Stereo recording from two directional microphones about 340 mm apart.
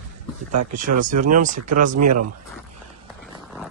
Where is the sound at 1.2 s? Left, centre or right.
Right.